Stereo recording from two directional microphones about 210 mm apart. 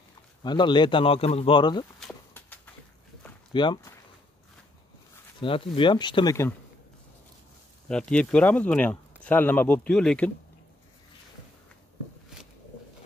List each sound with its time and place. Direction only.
0.4 s a man's voice: 20° left (ahead or behind)
2.0 s a sound: 5° left (ahead or behind)
3.5 s speech: 20° left (ahead or behind)
5.4 s a man's voice: 25° left (ahead or behind)
7.9 s speech: 5° left (ahead or behind)